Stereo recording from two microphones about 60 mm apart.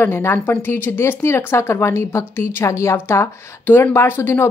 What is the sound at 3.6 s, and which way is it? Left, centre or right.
Speech, left.